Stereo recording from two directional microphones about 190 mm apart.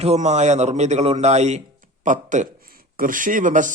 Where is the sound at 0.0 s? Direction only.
35° right (ahead or behind).